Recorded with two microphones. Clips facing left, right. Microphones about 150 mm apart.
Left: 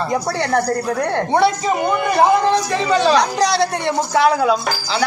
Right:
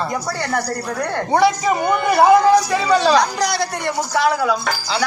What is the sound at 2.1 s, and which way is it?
A man's voice, 10° right (ahead or behind).